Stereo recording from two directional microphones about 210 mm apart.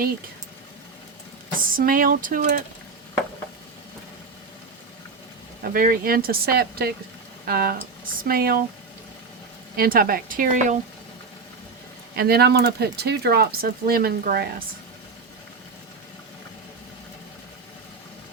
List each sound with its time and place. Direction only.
1.5 s speech: 40° right (ahead or behind)
5.6 s speech: 45° right (ahead or behind)
9.7 s speech: 45° right (ahead or behind)
12.1 s speech: 50° right (ahead or behind)